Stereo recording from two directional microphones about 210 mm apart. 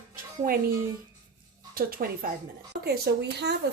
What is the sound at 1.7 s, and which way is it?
A woman's voice, 45° right (ahead or behind).